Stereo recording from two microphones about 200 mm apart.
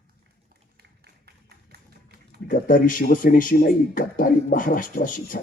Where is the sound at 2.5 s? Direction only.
40° left (ahead or behind).